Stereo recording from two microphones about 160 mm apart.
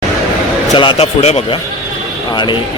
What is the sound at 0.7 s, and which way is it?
Speech, 30° left (ahead or behind).